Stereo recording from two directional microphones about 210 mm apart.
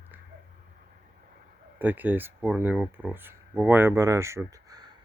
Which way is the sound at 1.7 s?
10° right (ahead or behind).